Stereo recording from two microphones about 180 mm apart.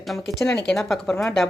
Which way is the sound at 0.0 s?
Centre (ahead or behind).